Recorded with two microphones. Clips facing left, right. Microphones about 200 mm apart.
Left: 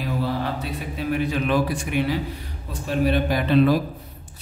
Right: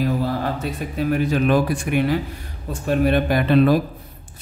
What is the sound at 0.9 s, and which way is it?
A man's voice, 45° right (ahead or behind).